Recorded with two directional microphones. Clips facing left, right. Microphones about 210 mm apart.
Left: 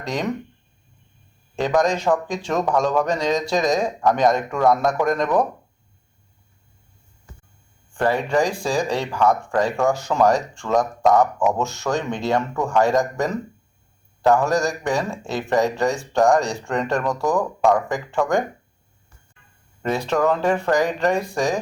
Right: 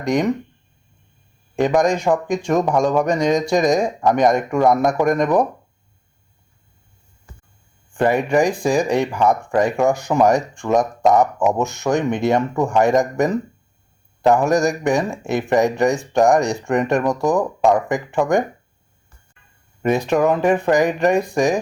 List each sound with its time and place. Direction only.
0.0 s speech: 15° right (ahead or behind)
1.5 s speech: 15° right (ahead or behind)
7.9 s speech: 15° right (ahead or behind)
19.8 s speech: 15° right (ahead or behind)